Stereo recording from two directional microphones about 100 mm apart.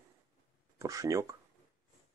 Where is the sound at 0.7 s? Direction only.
35° right (ahead or behind).